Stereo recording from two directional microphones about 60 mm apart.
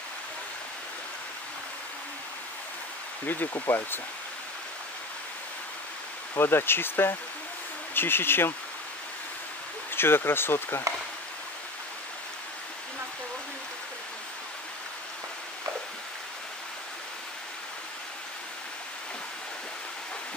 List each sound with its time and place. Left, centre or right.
3.3 s speech: left
6.3 s speech: left
9.9 s speech: left